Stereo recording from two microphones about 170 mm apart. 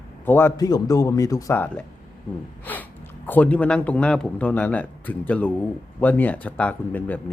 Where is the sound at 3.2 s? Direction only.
10° left (ahead or behind).